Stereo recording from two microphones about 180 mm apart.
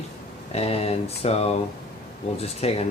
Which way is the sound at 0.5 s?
35° left (ahead or behind).